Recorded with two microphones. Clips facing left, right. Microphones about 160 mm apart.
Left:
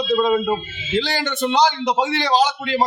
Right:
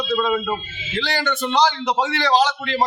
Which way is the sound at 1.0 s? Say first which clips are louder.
Left 2 dB; 20° left (ahead or behind).